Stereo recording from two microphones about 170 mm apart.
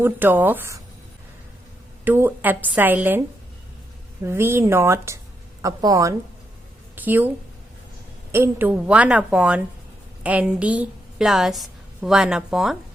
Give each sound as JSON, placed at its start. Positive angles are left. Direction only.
{"t": 0.0, "sound": "a woman's voice", "side_deg": -10}
{"t": 2.0, "sound": "a woman's voice", "side_deg": -10}
{"t": 8.3, "sound": "a woman's voice", "side_deg": -15}